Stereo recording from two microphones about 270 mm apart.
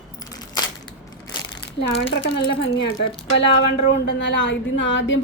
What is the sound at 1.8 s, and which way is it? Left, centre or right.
Speech, left.